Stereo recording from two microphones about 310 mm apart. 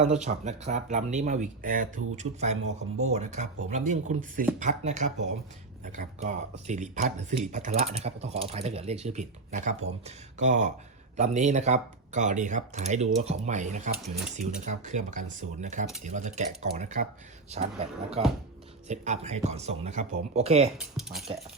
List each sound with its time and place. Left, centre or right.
0.0 s speech: right
20.7 s speech: centre